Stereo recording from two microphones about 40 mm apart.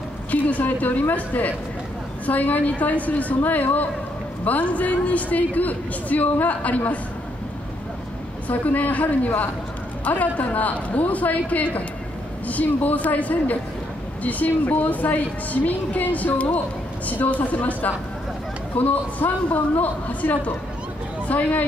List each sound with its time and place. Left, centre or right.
0.3 s a woman's voice: left
8.5 s a woman's voice: left